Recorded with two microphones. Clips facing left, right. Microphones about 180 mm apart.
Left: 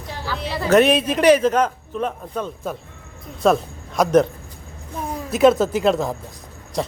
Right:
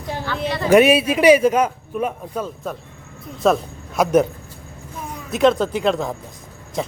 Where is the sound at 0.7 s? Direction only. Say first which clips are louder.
Right 2 dB; 10° right (ahead or behind).